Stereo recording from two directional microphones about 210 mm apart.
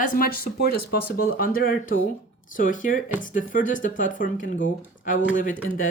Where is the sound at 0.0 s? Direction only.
40° left (ahead or behind).